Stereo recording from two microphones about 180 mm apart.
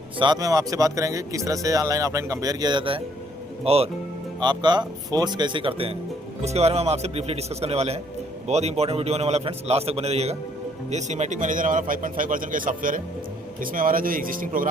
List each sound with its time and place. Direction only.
0.2 s a man's voice: 20° right (ahead or behind); by 14.7 s 50° right (ahead or behind)